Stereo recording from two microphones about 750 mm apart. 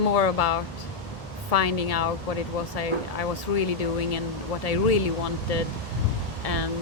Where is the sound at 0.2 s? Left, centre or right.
Left.